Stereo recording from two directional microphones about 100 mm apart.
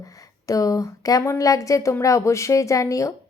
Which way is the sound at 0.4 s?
35° left (ahead or behind).